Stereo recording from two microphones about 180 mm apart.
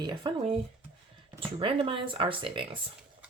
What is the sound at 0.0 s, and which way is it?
Speech, 25° right (ahead or behind).